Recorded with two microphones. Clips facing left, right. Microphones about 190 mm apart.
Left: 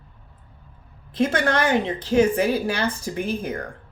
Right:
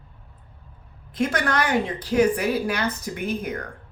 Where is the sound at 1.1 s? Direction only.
25° left (ahead or behind).